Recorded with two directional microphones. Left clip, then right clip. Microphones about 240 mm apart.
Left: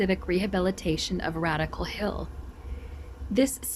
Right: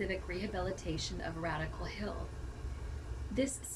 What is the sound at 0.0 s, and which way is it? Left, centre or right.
Speech, left.